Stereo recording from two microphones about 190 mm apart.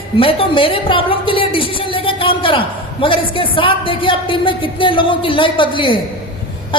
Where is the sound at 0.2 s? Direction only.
30° left (ahead or behind).